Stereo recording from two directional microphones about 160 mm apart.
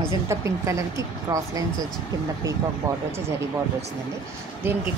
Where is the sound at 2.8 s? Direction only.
20° right (ahead or behind).